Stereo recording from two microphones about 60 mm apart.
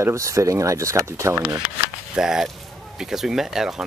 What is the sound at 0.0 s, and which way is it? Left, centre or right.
Speech, right.